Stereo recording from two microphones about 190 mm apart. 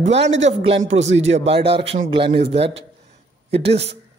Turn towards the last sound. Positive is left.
turn(degrees=-30)  # may be behind; listen again after turning